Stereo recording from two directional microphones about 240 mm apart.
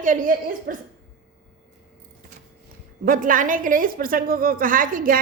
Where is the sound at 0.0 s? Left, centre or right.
Right.